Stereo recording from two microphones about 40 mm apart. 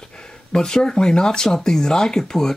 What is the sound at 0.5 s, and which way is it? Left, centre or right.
Speech, centre.